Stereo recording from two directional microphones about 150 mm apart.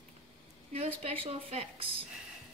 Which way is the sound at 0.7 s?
40° right (ahead or behind).